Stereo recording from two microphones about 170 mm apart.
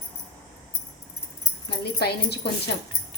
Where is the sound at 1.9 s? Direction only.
70° left (ahead or behind).